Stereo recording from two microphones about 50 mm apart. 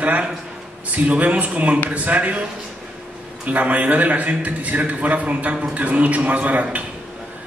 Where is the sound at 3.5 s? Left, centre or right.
Right.